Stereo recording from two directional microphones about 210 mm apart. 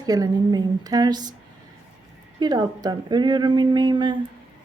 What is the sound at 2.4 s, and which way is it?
Speech, 20° right (ahead or behind).